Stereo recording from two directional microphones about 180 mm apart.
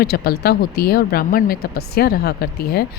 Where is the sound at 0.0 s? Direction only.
60° left (ahead or behind).